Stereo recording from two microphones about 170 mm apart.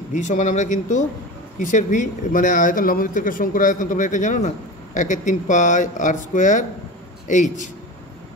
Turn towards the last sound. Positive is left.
turn(degrees=45)  # may be behind; listen again after turning